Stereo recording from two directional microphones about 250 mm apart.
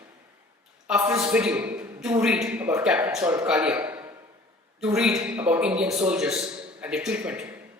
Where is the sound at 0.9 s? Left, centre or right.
Centre.